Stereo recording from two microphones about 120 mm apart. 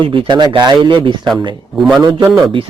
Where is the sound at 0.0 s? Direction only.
40° right (ahead or behind).